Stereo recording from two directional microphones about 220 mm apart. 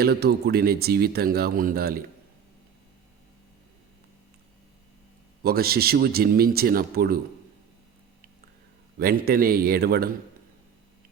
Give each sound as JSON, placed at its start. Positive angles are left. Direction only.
{"t": 0.0, "sound": "speech", "side_deg": -45}
{"t": 5.4, "sound": "speech", "side_deg": -45}
{"t": 9.0, "sound": "speech", "side_deg": -45}